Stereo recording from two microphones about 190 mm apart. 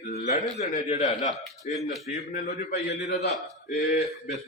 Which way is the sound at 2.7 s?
65° left (ahead or behind).